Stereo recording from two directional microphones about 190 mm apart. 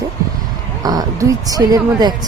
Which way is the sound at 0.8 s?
20° right (ahead or behind).